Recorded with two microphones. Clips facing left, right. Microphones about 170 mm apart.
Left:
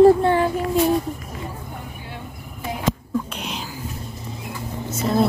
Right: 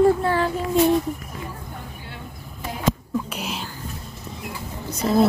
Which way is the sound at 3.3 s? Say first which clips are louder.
Right 1 dB; 5° right (ahead or behind).